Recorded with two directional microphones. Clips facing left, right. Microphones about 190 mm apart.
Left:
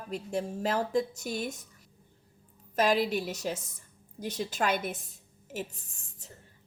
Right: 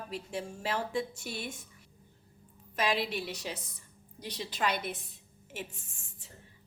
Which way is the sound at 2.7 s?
45° left (ahead or behind).